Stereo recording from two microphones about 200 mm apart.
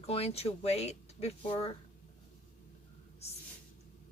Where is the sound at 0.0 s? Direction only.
30° left (ahead or behind).